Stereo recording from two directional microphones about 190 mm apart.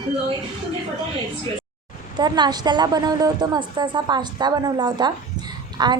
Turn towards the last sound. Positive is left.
turn(degrees=-20)  # may be behind; listen again after turning